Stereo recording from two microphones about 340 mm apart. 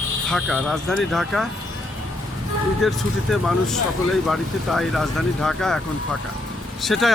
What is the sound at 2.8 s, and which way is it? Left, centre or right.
Speech, centre.